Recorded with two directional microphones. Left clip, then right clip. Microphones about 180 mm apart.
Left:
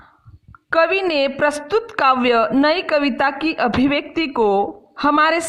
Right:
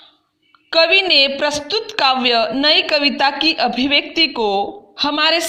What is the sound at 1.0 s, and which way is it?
A woman's voice, 30° left (ahead or behind).